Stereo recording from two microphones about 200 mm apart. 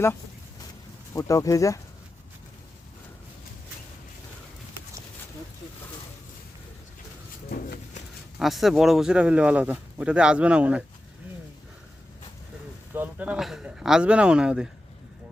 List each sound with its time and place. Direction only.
1.1 s speech: 15° left (ahead or behind)
8.4 s speech: centre (ahead or behind)
12.9 s speech: 10° right (ahead or behind)